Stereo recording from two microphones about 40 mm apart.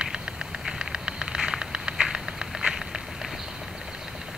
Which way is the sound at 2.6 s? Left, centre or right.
Centre.